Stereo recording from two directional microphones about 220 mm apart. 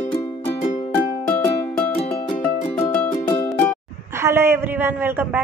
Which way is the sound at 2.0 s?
25° left (ahead or behind).